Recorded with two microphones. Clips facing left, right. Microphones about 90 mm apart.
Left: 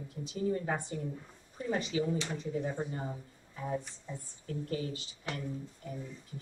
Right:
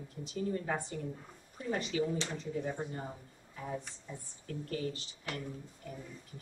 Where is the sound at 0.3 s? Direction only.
20° left (ahead or behind).